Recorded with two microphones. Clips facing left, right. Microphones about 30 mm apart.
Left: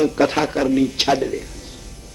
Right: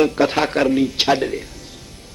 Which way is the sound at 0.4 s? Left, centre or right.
Right.